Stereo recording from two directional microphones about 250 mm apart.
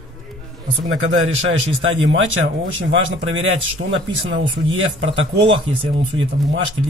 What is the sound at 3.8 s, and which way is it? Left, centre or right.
Speech, right.